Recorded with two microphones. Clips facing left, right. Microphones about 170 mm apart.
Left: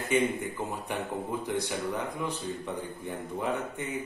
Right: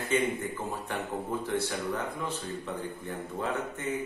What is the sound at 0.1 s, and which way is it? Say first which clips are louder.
Speech: left 2 dB; 15° left (ahead or behind).